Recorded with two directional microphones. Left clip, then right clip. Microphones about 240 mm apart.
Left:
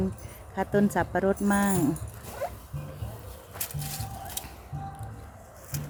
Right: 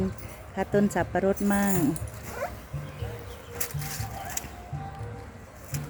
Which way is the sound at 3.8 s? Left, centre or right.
Centre.